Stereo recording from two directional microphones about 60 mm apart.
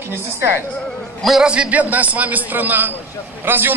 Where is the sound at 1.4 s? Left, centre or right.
Centre.